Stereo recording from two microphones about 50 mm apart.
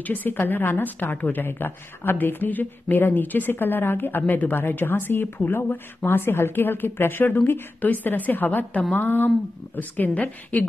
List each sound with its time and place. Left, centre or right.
0.0 s a woman's voice: left
1.4 s a woman's voice: left